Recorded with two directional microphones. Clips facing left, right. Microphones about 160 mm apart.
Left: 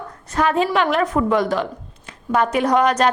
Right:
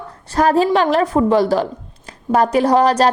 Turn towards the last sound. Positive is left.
turn(degrees=-35)  # may be behind; listen again after turning